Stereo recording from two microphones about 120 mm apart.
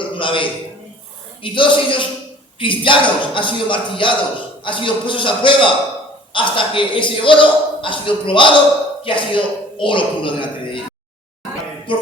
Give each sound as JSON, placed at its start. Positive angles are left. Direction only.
{"t": 0.2, "sound": "a man's voice", "side_deg": 45}